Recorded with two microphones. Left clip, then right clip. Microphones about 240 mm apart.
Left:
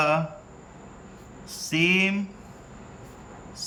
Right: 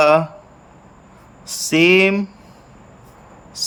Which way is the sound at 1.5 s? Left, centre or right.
Right.